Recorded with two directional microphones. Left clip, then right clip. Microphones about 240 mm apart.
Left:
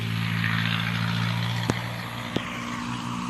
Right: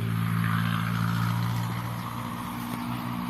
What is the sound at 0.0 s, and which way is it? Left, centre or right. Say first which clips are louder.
Vehicle: left 4 dB; right.